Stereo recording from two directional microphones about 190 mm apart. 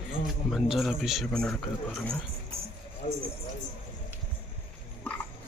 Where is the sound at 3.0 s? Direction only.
40° left (ahead or behind).